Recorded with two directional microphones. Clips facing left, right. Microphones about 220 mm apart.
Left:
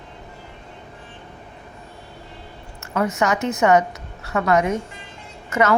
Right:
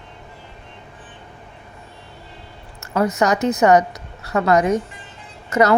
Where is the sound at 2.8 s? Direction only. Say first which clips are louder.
Right 3 dB; 35° right (ahead or behind).